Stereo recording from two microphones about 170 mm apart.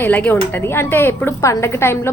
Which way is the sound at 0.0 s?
10° left (ahead or behind).